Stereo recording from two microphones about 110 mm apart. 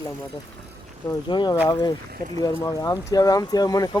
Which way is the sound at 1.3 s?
40° left (ahead or behind).